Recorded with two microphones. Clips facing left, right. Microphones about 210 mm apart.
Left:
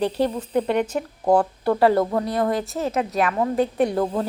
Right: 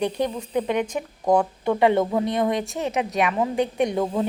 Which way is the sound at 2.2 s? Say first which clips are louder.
Even; 20° right (ahead or behind).